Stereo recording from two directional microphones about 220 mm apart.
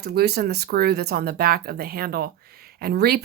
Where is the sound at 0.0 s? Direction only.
45° right (ahead or behind).